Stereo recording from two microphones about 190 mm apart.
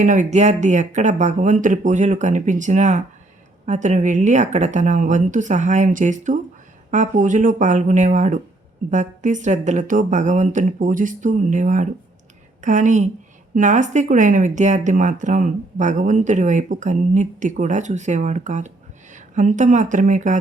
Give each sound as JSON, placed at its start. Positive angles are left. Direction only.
{"t": 0.0, "sound": "speech", "side_deg": -40}